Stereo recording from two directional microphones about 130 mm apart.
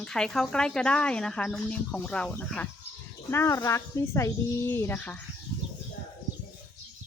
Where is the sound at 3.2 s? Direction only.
20° left (ahead or behind).